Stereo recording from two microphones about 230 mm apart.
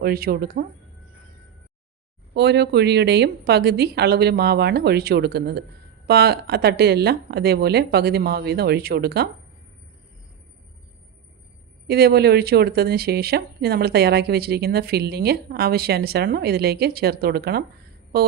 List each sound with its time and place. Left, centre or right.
0.0 s speech: right
2.3 s speech: right
11.9 s speech: right